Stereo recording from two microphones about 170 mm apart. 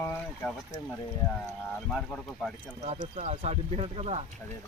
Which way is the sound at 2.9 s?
40° right (ahead or behind).